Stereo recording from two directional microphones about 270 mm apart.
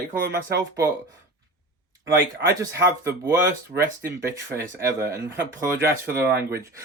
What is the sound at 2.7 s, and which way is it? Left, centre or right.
Speech, centre.